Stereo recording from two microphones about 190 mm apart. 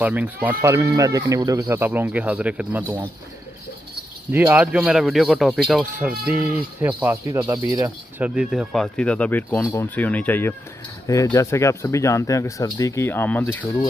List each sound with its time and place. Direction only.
0.0 s speech: 10° right (ahead or behind)
4.3 s speech: 10° right (ahead or behind); by 13.7 s 10° left (ahead or behind)